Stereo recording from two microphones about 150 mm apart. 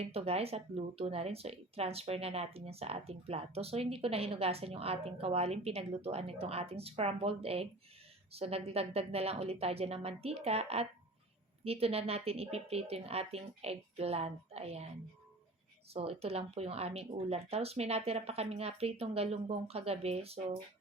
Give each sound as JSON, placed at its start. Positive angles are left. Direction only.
{"t": 0.0, "sound": "speech", "side_deg": -45}
{"t": 15.9, "sound": "speech", "side_deg": -40}